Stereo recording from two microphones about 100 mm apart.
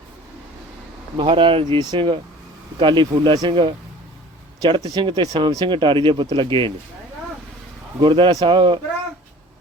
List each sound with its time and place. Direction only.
1.1 s speech: 55° right (ahead or behind)
1.8 s speech: 50° right (ahead or behind)
4.9 s speech: 55° right (ahead or behind)
7.9 s speech: 55° right (ahead or behind)